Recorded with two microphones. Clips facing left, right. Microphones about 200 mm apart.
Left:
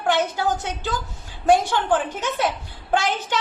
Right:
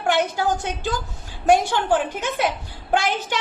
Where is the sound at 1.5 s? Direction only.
10° right (ahead or behind).